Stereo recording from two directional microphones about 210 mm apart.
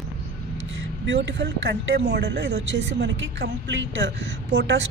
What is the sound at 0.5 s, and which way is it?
Speech, 60° right (ahead or behind).